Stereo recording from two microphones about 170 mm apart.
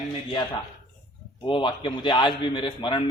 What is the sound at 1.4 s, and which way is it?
A man's voice, 30° left (ahead or behind).